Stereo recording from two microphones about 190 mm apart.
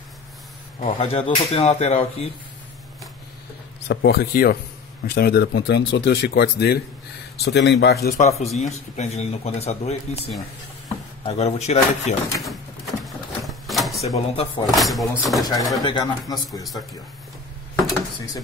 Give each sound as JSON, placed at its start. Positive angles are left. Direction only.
{"t": 0.7, "sound": "speech", "side_deg": 45}
{"t": 1.1, "sound": "speech", "side_deg": 30}
{"t": 3.8, "sound": "speech", "side_deg": 60}
{"t": 8.2, "sound": "speech", "side_deg": 35}
{"t": 12.4, "sound": "drawer open or close", "side_deg": 0}
{"t": 14.0, "sound": "speech", "side_deg": 30}
{"t": 14.7, "sound": "speech", "side_deg": 0}
{"t": 15.8, "sound": "speech", "side_deg": 25}